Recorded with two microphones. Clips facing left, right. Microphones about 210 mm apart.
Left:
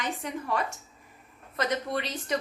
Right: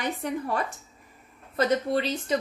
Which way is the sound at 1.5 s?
30° right (ahead or behind).